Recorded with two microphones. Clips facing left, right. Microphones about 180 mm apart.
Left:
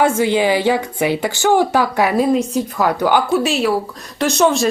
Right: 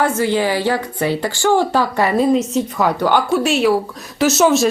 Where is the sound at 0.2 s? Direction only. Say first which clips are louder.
Left 2 dB; 15° left (ahead or behind).